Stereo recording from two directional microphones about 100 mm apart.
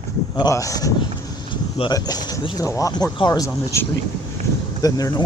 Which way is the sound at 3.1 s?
50° left (ahead or behind).